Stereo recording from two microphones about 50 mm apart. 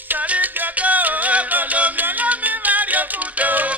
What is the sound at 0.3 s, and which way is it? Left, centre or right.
Music, right.